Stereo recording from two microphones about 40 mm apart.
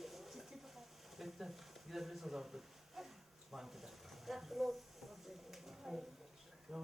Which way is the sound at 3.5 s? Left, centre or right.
Centre.